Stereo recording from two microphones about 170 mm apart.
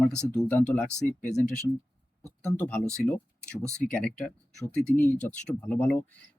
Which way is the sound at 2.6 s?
10° left (ahead or behind).